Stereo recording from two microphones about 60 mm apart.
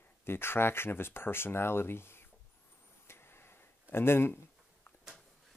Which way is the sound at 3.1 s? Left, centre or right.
Left.